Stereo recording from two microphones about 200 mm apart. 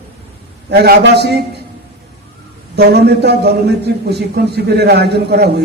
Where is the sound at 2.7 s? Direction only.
55° right (ahead or behind).